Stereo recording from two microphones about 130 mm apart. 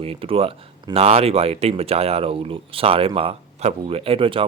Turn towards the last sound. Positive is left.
turn(degrees=-45)  # may be behind; listen again after turning